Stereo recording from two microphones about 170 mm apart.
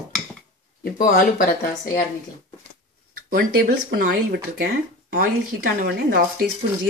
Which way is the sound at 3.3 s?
60° right (ahead or behind).